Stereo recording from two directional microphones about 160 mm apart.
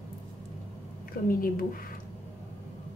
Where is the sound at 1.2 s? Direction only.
60° left (ahead or behind).